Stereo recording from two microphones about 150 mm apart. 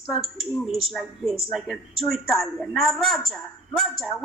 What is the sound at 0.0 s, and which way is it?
Speech, centre (ahead or behind).